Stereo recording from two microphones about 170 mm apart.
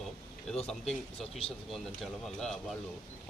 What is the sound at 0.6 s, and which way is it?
Speech, centre (ahead or behind).